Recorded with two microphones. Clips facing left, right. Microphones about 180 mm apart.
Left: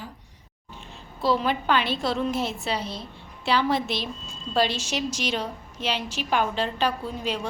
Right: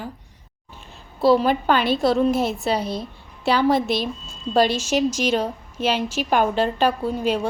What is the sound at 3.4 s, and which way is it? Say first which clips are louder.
A woman's voice: right 5 dB; 45° right (ahead or behind).